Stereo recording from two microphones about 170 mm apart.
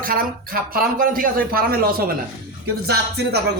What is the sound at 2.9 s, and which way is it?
Speech, 70° right (ahead or behind).